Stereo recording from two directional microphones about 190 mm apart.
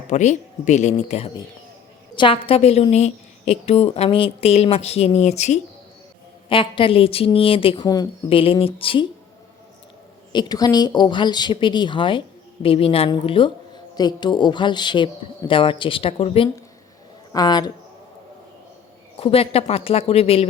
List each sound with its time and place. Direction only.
0.1 s a woman's voice: 40° left (ahead or behind)
10.3 s speech: 20° left (ahead or behind)
19.2 s a woman's voice: 30° left (ahead or behind)